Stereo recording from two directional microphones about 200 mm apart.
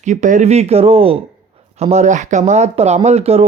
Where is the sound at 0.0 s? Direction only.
35° right (ahead or behind).